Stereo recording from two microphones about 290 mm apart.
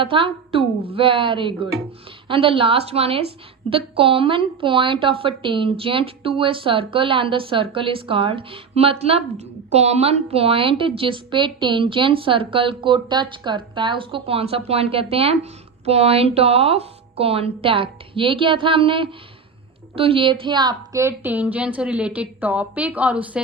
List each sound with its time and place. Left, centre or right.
0.0 s a woman's voice: centre